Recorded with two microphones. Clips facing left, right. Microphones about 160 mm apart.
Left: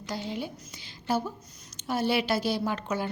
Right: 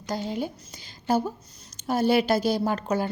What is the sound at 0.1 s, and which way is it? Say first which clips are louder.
A woman's voice: right 5 dB; 45° right (ahead or behind).